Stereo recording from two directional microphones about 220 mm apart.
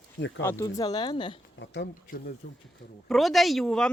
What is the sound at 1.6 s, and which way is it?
Speech, 50° left (ahead or behind).